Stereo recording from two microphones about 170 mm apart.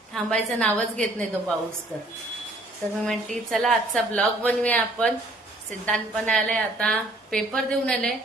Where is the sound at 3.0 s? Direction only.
5° left (ahead or behind).